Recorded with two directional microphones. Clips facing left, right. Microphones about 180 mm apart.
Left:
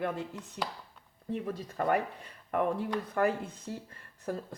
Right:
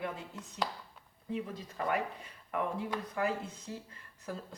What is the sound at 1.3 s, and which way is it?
Speech, 50° left (ahead or behind).